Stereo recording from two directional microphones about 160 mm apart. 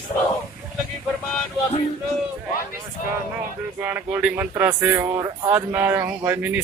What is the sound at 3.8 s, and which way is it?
Speech, 10° right (ahead or behind).